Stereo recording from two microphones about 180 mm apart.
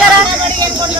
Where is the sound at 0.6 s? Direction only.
25° right (ahead or behind).